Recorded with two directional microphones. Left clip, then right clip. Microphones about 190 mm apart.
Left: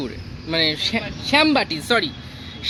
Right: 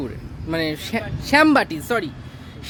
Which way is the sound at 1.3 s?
35° right (ahead or behind).